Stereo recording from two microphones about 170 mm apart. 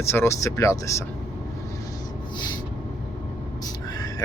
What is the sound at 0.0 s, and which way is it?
Speech, 15° left (ahead or behind).